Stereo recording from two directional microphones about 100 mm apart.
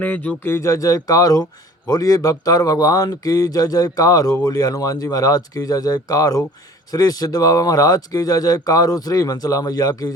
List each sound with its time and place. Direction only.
0.0 s speech: 15° left (ahead or behind); by 10.2 s 40° left (ahead or behind)